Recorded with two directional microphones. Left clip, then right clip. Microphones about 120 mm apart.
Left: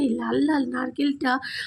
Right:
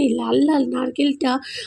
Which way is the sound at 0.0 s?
20° right (ahead or behind).